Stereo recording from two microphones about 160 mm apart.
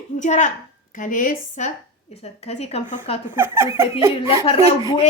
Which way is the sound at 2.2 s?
40° left (ahead or behind).